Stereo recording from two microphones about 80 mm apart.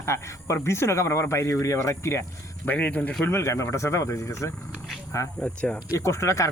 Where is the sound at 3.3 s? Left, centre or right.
Left.